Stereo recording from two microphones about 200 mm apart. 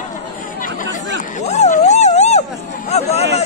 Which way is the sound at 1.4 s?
35° left (ahead or behind).